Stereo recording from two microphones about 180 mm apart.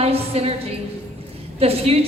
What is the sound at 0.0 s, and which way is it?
Speech, 35° right (ahead or behind).